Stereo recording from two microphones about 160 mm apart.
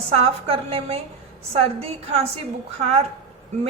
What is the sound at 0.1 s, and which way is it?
Speech, 40° right (ahead or behind).